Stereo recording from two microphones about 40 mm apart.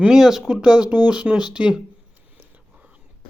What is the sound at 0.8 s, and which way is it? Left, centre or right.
Speech, right.